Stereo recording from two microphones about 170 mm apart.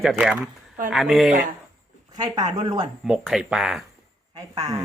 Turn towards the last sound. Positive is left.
turn(degrees=-20)  # may be behind; listen again after turning